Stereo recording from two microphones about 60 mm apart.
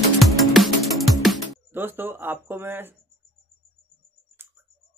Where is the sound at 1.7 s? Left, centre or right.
Right.